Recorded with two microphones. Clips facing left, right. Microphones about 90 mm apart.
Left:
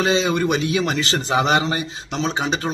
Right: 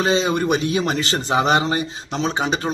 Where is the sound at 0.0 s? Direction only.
40° right (ahead or behind).